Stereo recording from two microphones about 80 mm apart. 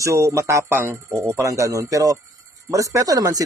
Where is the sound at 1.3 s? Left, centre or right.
Right.